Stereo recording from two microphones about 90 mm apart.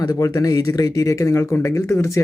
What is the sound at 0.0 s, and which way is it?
Speech, 40° left (ahead or behind).